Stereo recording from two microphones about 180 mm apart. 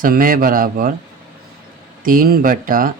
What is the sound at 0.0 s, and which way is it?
Speech, 50° right (ahead or behind).